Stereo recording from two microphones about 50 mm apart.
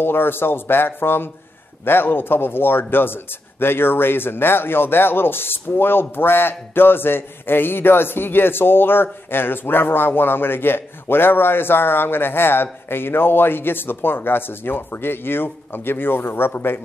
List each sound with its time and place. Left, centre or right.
0.0 s speech: left